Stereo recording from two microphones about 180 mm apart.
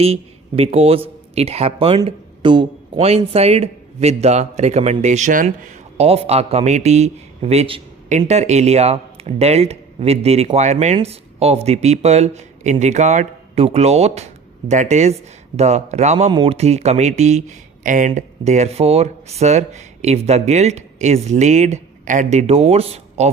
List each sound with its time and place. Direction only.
0.0 s speech: 35° right (ahead or behind)